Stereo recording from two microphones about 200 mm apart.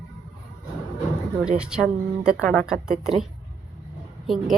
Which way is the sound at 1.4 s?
5° right (ahead or behind).